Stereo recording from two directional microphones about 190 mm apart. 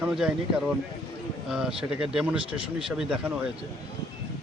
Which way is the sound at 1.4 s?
5° right (ahead or behind).